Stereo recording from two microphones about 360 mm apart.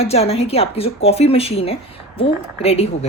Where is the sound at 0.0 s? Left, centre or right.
Centre.